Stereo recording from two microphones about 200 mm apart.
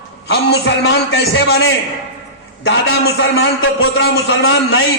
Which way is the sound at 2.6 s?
80° left.